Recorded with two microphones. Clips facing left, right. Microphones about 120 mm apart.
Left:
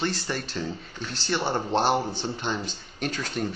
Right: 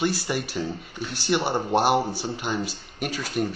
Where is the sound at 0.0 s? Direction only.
10° right (ahead or behind).